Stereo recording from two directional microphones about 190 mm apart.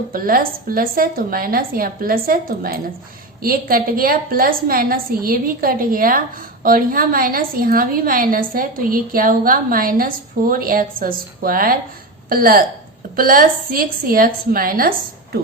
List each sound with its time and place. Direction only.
0.1 s a woman's voice: 50° right (ahead or behind)